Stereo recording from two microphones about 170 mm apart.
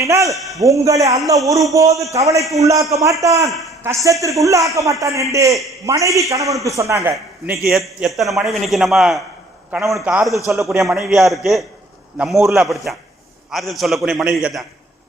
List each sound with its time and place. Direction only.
0.0 s a man's voice: 20° right (ahead or behind)
0.3 s a man's voice: centre (ahead or behind)
0.6 s a man's voice: 20° right (ahead or behind)
7.7 s a man's voice: centre (ahead or behind)